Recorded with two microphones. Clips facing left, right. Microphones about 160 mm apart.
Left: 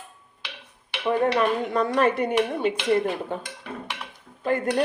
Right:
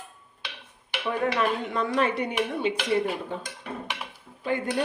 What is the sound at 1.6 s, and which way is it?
Speech, 40° left (ahead or behind).